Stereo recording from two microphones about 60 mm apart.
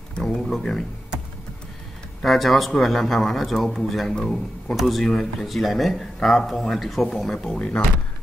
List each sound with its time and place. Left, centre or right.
0.3 s speech: centre
2.2 s speech: centre
7.5 s speech: left